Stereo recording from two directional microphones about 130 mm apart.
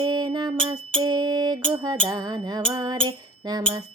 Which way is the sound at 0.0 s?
35° right (ahead or behind).